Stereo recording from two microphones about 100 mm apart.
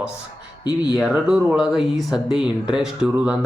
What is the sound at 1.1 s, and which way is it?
Speech, 10° right (ahead or behind).